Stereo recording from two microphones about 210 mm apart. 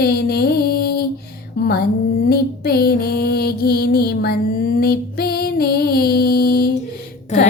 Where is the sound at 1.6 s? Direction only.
50° left (ahead or behind).